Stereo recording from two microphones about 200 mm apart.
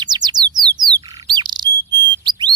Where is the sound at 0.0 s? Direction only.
20° right (ahead or behind).